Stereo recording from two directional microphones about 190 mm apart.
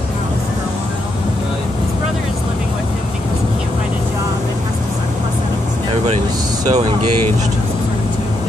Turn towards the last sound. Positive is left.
turn(degrees=-35)  # may be behind; listen again after turning